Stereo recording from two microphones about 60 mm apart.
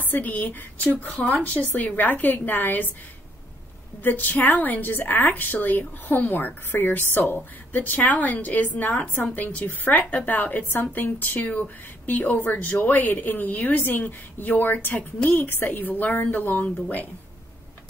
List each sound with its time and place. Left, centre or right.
0.0 s a woman's voice: left
4.0 s a woman's voice: left